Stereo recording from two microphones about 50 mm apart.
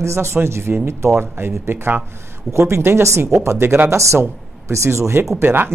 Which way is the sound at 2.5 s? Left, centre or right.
Right.